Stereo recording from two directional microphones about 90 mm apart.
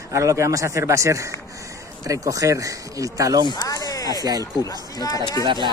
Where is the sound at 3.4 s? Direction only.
45° left (ahead or behind).